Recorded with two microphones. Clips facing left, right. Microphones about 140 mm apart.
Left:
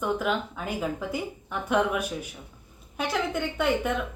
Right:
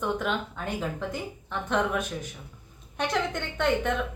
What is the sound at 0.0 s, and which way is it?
A woman's voice, 5° left (ahead or behind).